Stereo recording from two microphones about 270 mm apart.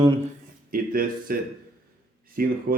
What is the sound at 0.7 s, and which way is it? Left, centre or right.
Speech, right.